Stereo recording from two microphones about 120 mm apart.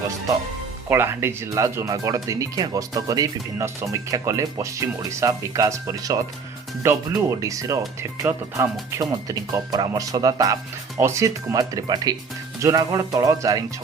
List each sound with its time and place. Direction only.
0.9 s speech: 20° right (ahead or behind)